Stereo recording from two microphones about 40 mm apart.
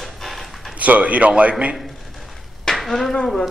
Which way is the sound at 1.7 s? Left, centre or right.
Centre.